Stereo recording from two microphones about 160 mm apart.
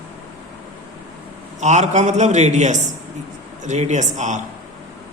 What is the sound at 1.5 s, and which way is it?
Speech, 45° right (ahead or behind).